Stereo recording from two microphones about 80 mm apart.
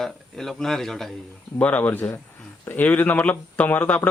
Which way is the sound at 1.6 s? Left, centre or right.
Centre.